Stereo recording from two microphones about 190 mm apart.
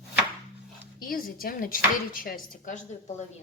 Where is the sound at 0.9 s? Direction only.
50° left (ahead or behind).